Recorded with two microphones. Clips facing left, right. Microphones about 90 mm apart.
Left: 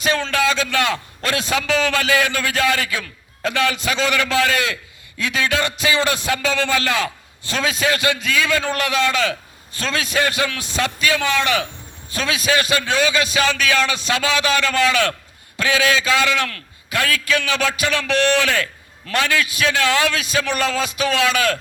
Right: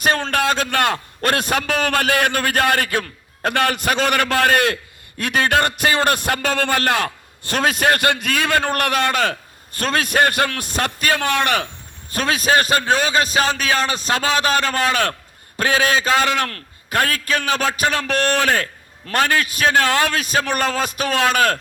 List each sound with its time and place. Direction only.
0.0 s a man's voice: 50° right (ahead or behind)